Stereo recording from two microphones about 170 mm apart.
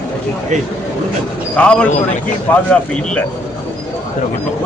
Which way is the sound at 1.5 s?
5° left (ahead or behind).